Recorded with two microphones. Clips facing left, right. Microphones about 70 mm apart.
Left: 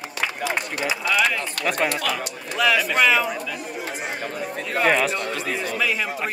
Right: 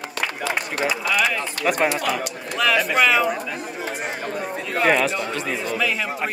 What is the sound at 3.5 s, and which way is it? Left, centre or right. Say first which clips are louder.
Speech: right 2 dB; right.